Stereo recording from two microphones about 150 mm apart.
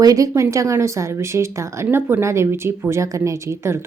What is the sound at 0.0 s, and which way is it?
A woman's voice, 20° right (ahead or behind).